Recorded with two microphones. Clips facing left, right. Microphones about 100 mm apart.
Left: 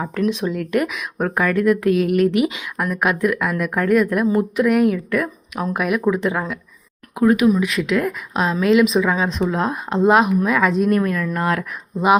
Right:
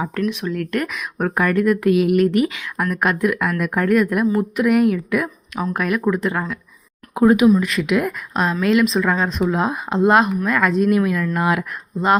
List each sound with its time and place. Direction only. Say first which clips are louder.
0.0 s speech: even; centre (ahead or behind)
0.3 s speech: left 3 dB; 25° left (ahead or behind)
0.5 s speech: left 2 dB; 5° left (ahead or behind)
2.4 s a woman's voice: even; 15° left (ahead or behind)
2.7 s speech: right 2 dB; centre (ahead or behind)
7.2 s speech: right 2 dB; 25° right (ahead or behind)
7.5 s speech: right 1 dB; centre (ahead or behind)